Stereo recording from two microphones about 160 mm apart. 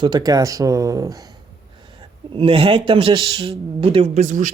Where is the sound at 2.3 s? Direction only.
35° right (ahead or behind); by 4.5 s 50° right (ahead or behind).